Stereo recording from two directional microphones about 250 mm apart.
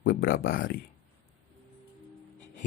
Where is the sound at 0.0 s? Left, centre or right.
Left.